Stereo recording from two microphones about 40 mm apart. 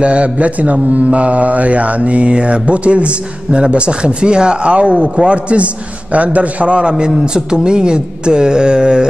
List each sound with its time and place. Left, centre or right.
0.0 s mantra: right
6.1 s a man's voice: right; by 9.0 s centre